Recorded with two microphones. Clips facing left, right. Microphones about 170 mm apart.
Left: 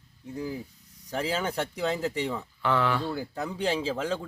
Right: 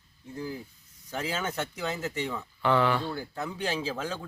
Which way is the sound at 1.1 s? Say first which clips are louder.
Left 3 dB; 35° left (ahead or behind).